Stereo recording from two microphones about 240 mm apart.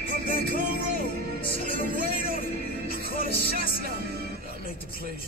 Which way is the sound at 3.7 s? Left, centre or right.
Right.